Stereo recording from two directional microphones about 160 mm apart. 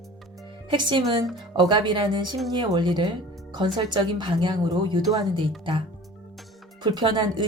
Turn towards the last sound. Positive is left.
turn(degrees=-30)  # may be behind; listen again after turning